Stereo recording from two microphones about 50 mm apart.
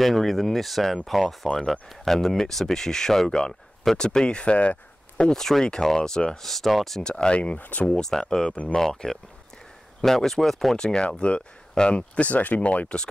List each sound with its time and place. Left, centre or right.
0.0 s speech: centre; by 5.2 s left
5.2 s speech: centre
7.0 s speech: centre
7.5 s speech: left
7.8 s speech: centre
10.8 s speech: centre